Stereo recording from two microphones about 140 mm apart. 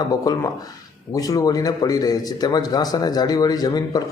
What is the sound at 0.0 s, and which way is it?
A man's voice, 25° left (ahead or behind).